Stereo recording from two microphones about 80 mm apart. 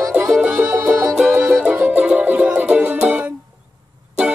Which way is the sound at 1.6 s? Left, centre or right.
Centre.